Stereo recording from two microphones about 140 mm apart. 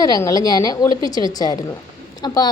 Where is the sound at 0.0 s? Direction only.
25° left (ahead or behind).